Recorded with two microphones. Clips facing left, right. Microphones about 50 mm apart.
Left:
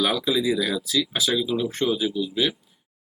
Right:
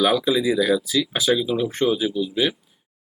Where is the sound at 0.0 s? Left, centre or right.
Centre.